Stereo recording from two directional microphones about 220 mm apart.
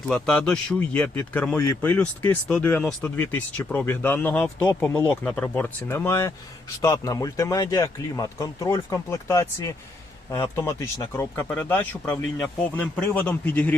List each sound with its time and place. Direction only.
0.1 s speech: 5° left (ahead or behind)